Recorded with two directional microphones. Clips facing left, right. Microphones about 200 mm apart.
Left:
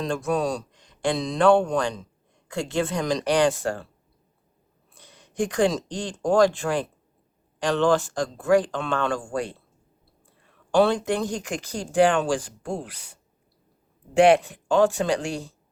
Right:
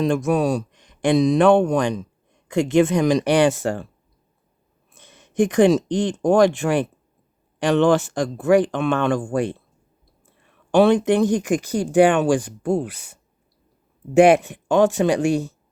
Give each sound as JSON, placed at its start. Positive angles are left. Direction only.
{"t": 0.3, "sound": "speech", "side_deg": -20}
{"t": 4.9, "sound": "speech", "side_deg": -20}
{"t": 10.8, "sound": "speech", "side_deg": -20}
{"t": 14.3, "sound": "speech", "side_deg": -20}